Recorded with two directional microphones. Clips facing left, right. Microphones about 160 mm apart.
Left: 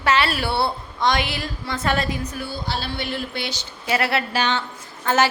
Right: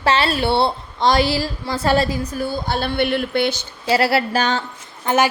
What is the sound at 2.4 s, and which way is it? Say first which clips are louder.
Speech: right 6 dB; 50° right (ahead or behind).